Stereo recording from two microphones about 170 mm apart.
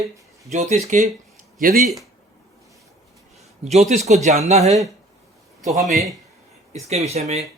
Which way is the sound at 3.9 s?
40° right (ahead or behind).